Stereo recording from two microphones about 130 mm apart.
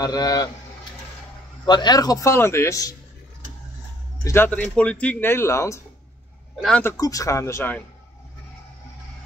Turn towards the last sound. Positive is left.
turn(degrees=20)  # may be behind; listen again after turning